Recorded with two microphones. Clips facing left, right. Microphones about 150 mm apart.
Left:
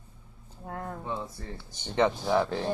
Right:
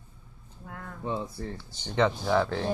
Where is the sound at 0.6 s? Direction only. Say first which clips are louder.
Left 6 dB; 35° left (ahead or behind).